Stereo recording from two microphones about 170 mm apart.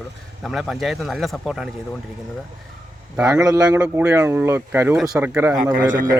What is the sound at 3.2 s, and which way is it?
Speech, 20° right (ahead or behind).